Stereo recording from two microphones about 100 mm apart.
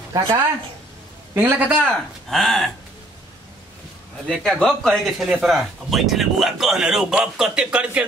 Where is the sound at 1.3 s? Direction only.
15° right (ahead or behind).